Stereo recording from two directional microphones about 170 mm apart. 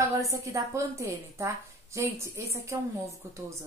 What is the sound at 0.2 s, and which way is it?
A woman's voice, 20° right (ahead or behind).